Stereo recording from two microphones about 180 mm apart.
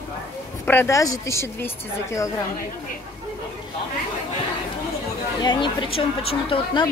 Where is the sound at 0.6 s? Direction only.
15° left (ahead or behind).